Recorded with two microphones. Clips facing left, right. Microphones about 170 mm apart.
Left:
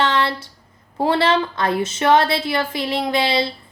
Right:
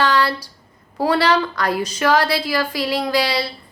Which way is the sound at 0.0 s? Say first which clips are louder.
Right 1 dB; 25° left (ahead or behind).